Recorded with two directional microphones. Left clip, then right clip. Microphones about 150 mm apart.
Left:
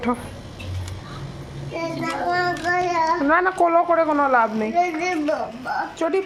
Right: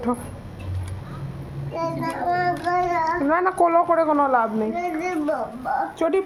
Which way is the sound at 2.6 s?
10° left (ahead or behind).